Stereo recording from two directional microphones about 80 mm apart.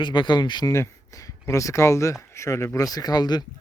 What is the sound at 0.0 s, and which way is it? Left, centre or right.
Speech, left.